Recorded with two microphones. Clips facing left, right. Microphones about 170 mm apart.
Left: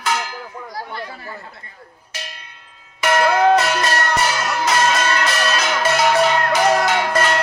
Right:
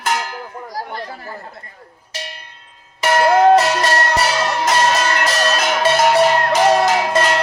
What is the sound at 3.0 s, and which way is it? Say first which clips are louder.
Music: right 3 dB; 35° right (ahead or behind).